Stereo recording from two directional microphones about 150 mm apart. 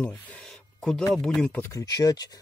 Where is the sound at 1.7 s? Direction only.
25° left (ahead or behind).